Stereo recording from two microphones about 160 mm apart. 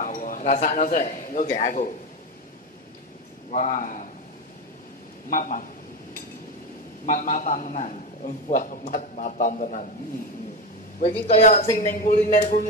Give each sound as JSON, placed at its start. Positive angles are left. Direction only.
{"t": 0.0, "sound": "a man's voice", "side_deg": 55}
{"t": 3.5, "sound": "a man's voice", "side_deg": 50}
{"t": 5.3, "sound": "speech", "side_deg": 55}
{"t": 7.1, "sound": "a man's voice", "side_deg": 55}
{"t": 11.2, "sound": "a woman's voice", "side_deg": 40}
{"t": 11.5, "sound": "speech", "side_deg": 60}